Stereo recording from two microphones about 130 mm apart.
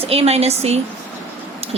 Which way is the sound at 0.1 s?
50° right (ahead or behind).